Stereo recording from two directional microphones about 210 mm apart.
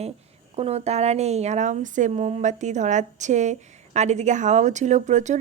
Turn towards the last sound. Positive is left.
turn(degrees=-35)  # may be behind; listen again after turning